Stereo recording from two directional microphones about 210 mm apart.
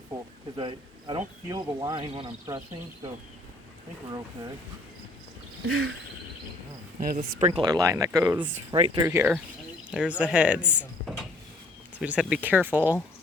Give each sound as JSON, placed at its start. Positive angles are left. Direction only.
{"t": 0.5, "sound": "speech", "side_deg": -20}
{"t": 5.6, "sound": "a sound", "side_deg": -80}
{"t": 7.0, "sound": "speech", "side_deg": -45}
{"t": 7.6, "sound": "speech", "side_deg": -15}
{"t": 9.9, "sound": "a sound", "side_deg": -5}
{"t": 11.9, "sound": "speech", "side_deg": -5}